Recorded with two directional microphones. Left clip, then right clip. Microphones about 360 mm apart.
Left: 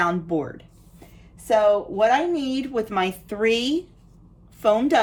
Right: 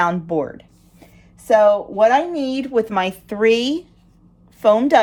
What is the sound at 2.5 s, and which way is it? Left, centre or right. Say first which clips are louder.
Speech: right 6 dB; right.